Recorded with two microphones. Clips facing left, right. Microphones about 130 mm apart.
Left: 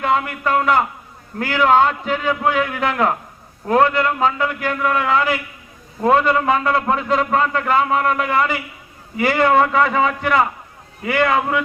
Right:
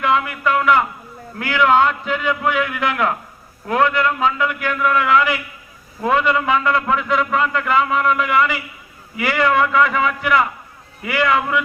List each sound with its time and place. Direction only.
0.0 s a man's voice: 35° left (ahead or behind)
9.1 s a man's voice: 40° left (ahead or behind)